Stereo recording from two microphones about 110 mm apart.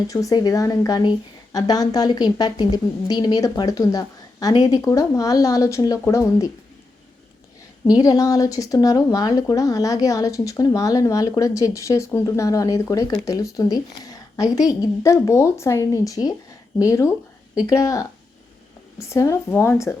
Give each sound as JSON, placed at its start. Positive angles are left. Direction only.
{"t": 0.1, "sound": "speech", "side_deg": 30}
{"t": 7.9, "sound": "speech", "side_deg": 35}